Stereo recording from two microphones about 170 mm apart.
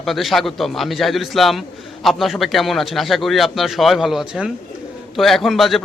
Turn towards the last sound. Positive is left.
turn(degrees=0)  # may be behind; listen again after turning